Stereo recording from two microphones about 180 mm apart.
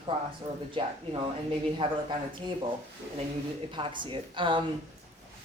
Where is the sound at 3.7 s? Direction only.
25° right (ahead or behind).